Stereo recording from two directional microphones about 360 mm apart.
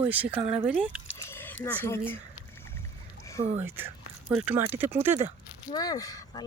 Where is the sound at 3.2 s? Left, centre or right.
Centre.